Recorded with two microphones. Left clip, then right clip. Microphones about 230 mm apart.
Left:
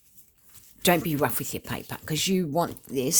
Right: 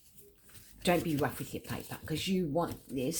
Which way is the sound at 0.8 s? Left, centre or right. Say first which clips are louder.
Left 7 dB; left.